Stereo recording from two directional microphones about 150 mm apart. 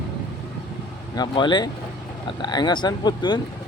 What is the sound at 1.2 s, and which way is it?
Speech, 30° left (ahead or behind).